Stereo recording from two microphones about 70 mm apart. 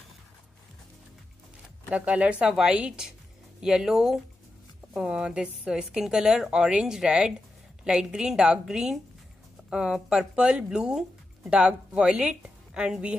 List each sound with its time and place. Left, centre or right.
1.9 s a woman's voice: centre